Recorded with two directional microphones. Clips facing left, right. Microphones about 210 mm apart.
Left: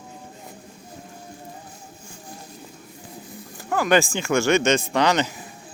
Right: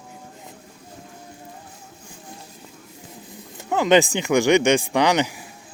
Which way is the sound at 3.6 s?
20° right (ahead or behind).